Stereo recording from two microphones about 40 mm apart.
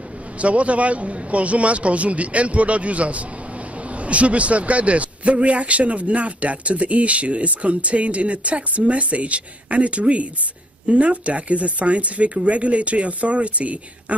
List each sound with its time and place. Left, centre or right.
0.4 s a man's voice: right